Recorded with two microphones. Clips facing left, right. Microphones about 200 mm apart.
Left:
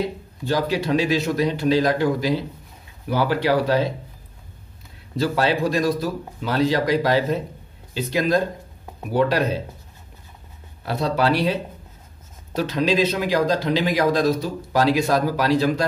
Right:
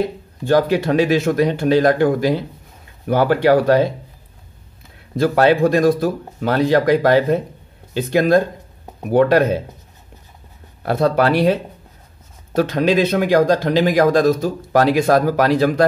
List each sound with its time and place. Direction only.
0.0 s speech: 55° right (ahead or behind)
5.1 s speech: 55° right (ahead or behind)
10.8 s speech: 55° right (ahead or behind)